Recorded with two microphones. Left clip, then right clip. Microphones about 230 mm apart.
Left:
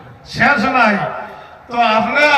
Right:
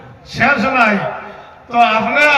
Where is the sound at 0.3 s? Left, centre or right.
Centre.